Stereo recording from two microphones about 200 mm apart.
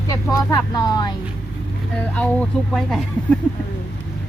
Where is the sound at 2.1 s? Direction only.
5° left (ahead or behind).